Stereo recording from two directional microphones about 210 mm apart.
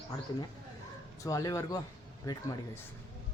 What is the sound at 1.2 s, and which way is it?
A man's voice, 15° left (ahead or behind).